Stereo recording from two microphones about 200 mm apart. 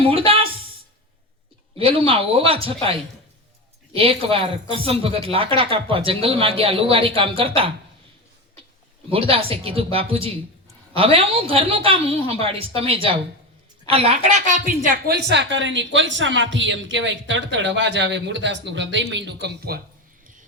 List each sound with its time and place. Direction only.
0.3 s a sound: 30° right (ahead or behind)
1.8 s speech: 30° right (ahead or behind)
3.9 s speech: 25° right (ahead or behind)
9.0 s a woman's voice: 25° right (ahead or behind)
15.0 s speech: 55° right (ahead or behind)